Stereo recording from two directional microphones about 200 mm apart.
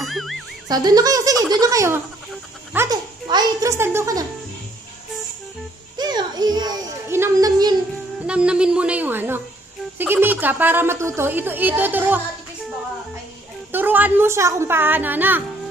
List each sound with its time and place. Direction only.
0.1 s music: centre (ahead or behind)
0.7 s a woman's voice: 20° right (ahead or behind)
5.9 s children playing: 20° right (ahead or behind)
8.3 s a woman's voice: 5° right (ahead or behind)
13.7 s a woman's voice: 10° right (ahead or behind)